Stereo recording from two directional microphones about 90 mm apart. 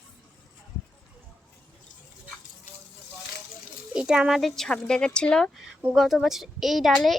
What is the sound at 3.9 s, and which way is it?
Speech, 10° right (ahead or behind).